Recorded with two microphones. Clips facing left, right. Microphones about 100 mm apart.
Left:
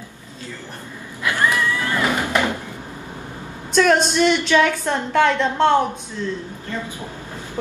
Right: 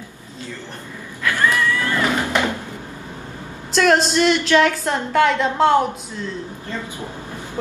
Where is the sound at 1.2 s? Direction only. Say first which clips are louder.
Right 1 dB; 15° left (ahead or behind).